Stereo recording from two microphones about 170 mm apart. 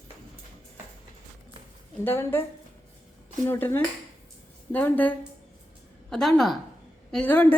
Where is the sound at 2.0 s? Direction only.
15° left (ahead or behind).